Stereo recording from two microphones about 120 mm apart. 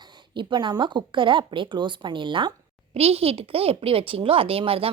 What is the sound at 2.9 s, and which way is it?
Speech, 55° right (ahead or behind).